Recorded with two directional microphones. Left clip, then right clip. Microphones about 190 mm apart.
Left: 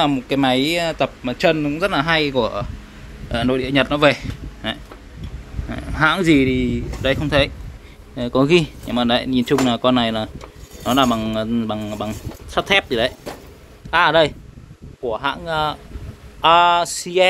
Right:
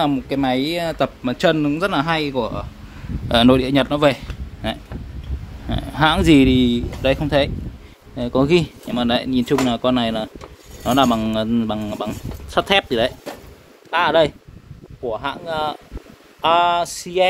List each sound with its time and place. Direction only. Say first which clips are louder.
0.0 s a man's voice: left 2 dB; 15° right (ahead or behind)
0.9 s a man's voice: even; 25° right (ahead or behind)
1.9 s speech: left 2 dB; 10° right (ahead or behind)
3.3 s a man's voice: right 6 dB; 30° right (ahead or behind)
7.0 s a man's voice: left 1 dB; 15° right (ahead or behind)